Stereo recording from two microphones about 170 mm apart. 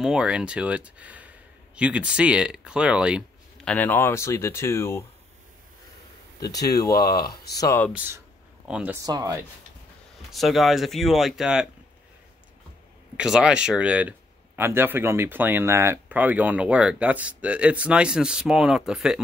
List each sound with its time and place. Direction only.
0.0 s speech: 5° right (ahead or behind)
3.6 s speech: 10° left (ahead or behind)
6.4 s speech: 20° left (ahead or behind)
7.0 s speech: 65° left (ahead or behind)
7.5 s speech: 20° left (ahead or behind)
8.6 s speech: 5° right (ahead or behind)
9.0 s speech: 25° right (ahead or behind)
10.3 s speech: centre (ahead or behind)
13.2 s speech: 5° right (ahead or behind)